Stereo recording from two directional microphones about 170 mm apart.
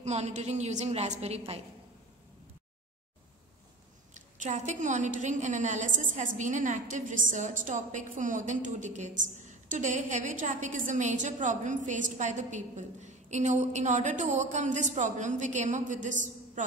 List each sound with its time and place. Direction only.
0.0 s a woman's voice: 40° right (ahead or behind)
4.1 s a woman's voice: 45° right (ahead or behind)